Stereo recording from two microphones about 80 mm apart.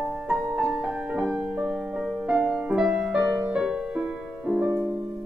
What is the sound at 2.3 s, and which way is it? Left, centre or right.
Music, centre.